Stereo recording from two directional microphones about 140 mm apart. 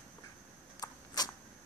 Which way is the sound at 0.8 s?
30° left (ahead or behind).